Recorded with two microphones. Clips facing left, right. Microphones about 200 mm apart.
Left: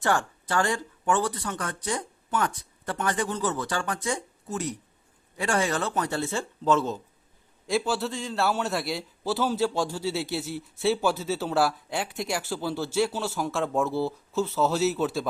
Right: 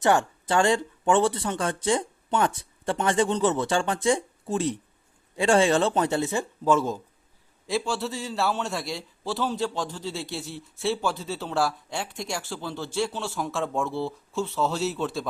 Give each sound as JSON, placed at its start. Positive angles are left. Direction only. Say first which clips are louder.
{"t": 0.0, "sound": "speech", "louder": "right 4 dB", "side_deg": -20}
{"t": 7.7, "sound": "a man's voice", "louder": "left 1 dB", "side_deg": 0}